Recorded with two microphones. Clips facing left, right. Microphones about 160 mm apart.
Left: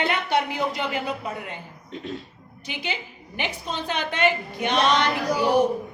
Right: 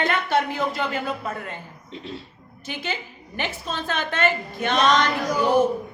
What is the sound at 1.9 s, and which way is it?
Music, 50° left (ahead or behind).